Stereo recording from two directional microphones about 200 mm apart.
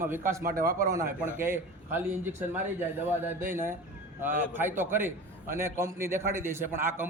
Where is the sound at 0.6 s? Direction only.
45° right (ahead or behind).